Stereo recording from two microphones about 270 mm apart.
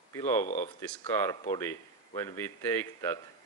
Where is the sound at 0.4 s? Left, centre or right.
Left.